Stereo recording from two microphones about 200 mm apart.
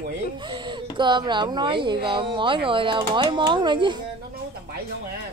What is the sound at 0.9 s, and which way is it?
A woman's voice, 25° right (ahead or behind).